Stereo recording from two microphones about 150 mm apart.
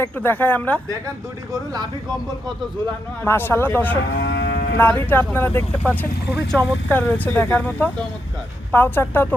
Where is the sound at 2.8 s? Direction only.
15° left (ahead or behind).